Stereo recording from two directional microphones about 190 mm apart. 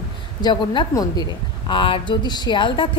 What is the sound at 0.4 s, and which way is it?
A woman's voice, 25° left (ahead or behind).